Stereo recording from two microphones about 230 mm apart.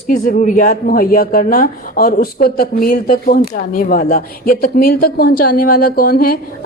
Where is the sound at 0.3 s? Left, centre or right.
Left.